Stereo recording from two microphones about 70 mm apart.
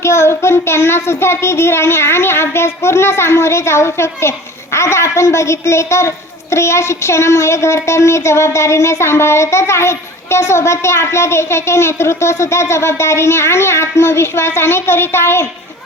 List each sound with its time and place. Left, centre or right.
0.0 s child singing: left